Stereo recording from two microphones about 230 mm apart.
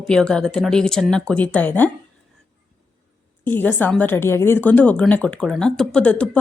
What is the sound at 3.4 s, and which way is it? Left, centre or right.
A woman's voice, centre.